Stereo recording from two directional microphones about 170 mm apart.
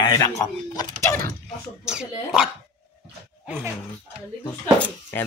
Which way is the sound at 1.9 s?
5° right (ahead or behind).